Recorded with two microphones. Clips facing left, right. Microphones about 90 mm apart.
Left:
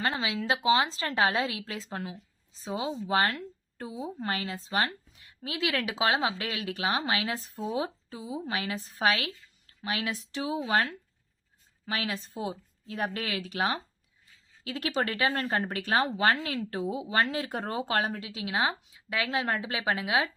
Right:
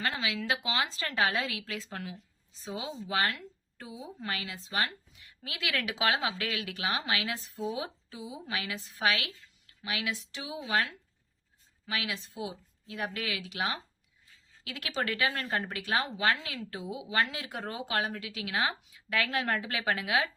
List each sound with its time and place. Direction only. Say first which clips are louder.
0.0 s speech: left 3 dB; 30° left (ahead or behind)